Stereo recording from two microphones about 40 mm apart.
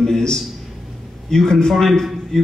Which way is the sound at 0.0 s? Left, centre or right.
Centre.